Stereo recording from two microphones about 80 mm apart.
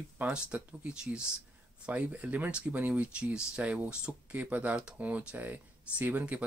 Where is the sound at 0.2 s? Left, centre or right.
Centre.